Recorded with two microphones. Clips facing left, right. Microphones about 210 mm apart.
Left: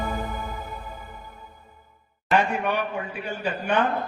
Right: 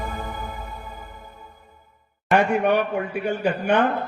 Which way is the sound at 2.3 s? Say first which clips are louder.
Right 5 dB; 60° right (ahead or behind).